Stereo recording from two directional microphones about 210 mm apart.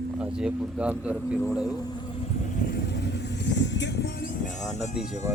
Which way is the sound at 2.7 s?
55° left (ahead or behind).